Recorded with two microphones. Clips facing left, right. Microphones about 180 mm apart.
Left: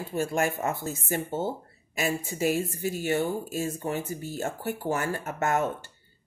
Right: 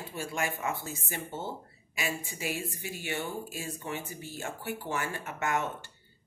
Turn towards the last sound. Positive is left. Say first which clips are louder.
# left 5 dB
turn(degrees=40)  # may be behind; listen again after turning